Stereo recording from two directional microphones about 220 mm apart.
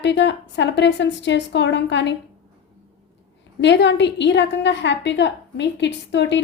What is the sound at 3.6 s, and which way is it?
A woman's voice, 55° left (ahead or behind).